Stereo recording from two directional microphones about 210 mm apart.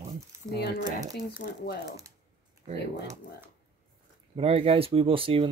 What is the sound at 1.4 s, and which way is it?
Speech, 45° left (ahead or behind).